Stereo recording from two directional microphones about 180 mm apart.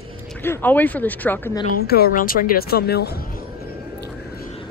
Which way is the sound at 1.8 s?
60° left (ahead or behind).